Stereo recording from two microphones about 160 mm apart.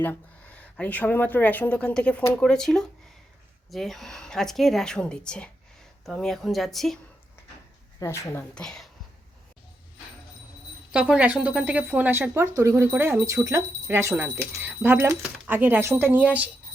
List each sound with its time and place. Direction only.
0.0 s a woman's voice: 10° left (ahead or behind)
7.9 s speech: 20° left (ahead or behind)
10.9 s speech: 10° right (ahead or behind)